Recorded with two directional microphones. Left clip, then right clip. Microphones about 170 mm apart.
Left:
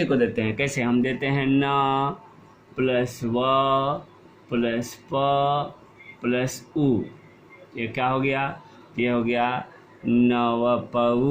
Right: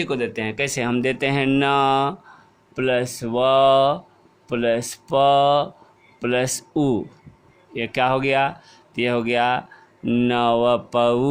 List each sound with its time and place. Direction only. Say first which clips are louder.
0.0 s speech: left 2 dB; 35° right (ahead or behind)
2.7 s speech: right 2 dB; 60° right (ahead or behind)